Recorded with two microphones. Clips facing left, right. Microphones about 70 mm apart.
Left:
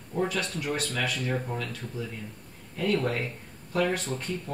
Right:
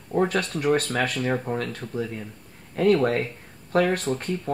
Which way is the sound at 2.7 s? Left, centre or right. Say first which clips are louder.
Right 7 dB; right.